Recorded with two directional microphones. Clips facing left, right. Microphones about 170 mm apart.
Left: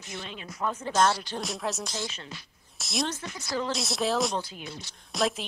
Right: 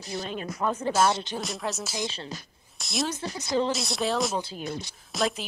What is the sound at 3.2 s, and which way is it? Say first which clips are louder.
Speech: right 5 dB; 25° right (ahead or behind).